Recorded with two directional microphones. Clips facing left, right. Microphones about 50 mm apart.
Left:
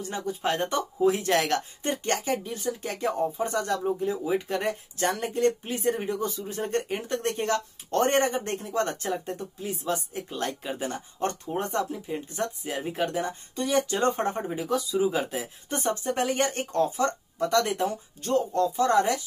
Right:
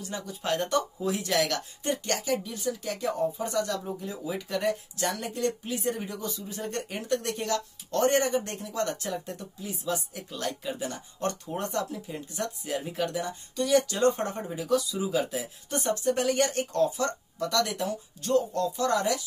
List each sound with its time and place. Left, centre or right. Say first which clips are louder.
0.1 s speech: left 2 dB; left
14.7 s speech: left 1 dB; left